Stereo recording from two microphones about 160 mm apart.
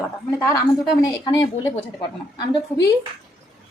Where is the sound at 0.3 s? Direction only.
20° left (ahead or behind).